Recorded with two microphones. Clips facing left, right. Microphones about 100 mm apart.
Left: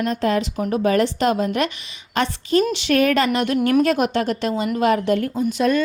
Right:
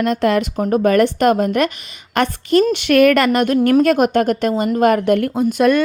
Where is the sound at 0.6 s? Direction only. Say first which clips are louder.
Right 6 dB; 45° right (ahead or behind).